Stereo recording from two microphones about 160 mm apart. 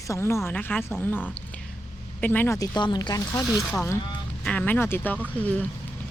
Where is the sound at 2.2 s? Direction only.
10° left (ahead or behind).